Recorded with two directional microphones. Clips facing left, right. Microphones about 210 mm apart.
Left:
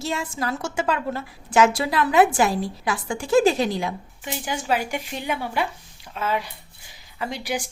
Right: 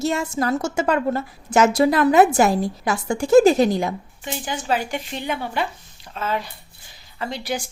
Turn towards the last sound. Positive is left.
turn(degrees=10)  # may be behind; listen again after turning